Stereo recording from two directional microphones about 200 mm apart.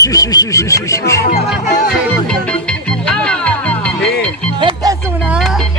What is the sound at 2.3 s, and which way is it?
Music, 5° left (ahead or behind).